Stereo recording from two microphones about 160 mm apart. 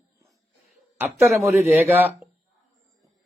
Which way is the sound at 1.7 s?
10° right (ahead or behind).